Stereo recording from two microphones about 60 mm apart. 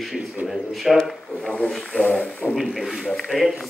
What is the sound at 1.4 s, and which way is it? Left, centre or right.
Speech, left.